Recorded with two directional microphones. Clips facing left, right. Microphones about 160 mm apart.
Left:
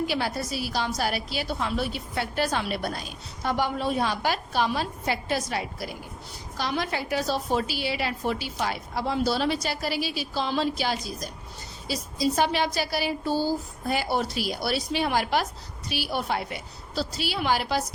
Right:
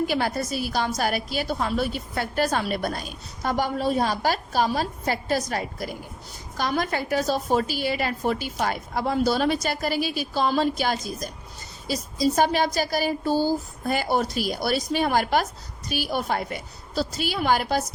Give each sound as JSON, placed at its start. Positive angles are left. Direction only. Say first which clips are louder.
{"t": 0.1, "sound": "a woman's voice", "louder": "right 3 dB", "side_deg": -50}